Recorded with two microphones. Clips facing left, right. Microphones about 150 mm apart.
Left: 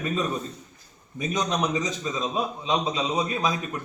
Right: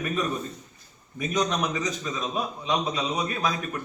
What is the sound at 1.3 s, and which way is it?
Speech, 25° left (ahead or behind).